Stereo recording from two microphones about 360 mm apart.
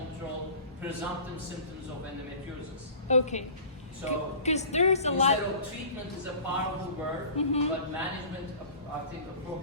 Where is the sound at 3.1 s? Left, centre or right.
Centre.